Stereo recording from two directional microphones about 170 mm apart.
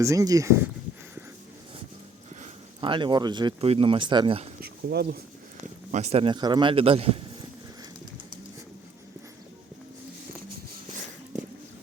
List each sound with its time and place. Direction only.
0.0 s speech: 20° right (ahead or behind)
2.8 s speech: 30° right (ahead or behind)
4.6 s speech: 70° right (ahead or behind)
5.9 s a man's voice: 40° right (ahead or behind)